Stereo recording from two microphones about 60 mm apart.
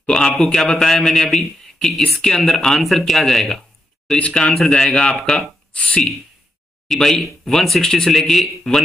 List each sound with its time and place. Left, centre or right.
0.0 s a man's voice: centre
5.1 s speech: centre
5.8 s speech: centre
6.9 s speech: centre